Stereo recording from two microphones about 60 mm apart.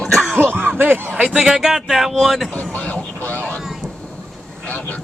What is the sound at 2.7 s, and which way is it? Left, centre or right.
Vehicle, left.